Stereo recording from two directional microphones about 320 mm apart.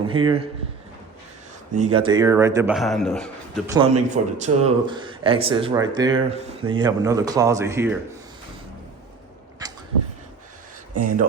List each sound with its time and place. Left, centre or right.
0.1 s speech: centre
1.7 s speech: centre
3.7 s speech: centre